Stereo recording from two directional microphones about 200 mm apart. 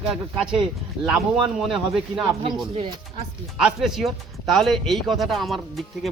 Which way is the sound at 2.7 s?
30° right (ahead or behind).